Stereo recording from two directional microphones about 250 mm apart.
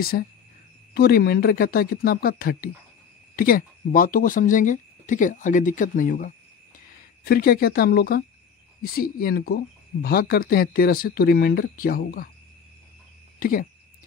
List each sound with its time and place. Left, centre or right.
0.1 s speech: left
13.4 s speech: left